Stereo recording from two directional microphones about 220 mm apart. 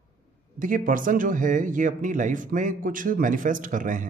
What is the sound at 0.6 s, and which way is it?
Speech, 40° right (ahead or behind).